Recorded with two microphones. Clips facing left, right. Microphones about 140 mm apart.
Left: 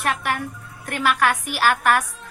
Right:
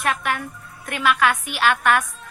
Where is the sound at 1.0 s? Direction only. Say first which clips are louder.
Right 1 dB; 40° left (ahead or behind).